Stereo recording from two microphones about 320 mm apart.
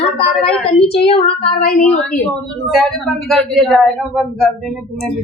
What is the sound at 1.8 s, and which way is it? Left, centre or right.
Speech, centre.